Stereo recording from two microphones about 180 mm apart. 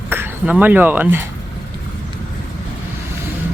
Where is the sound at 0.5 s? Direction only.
10° right (ahead or behind).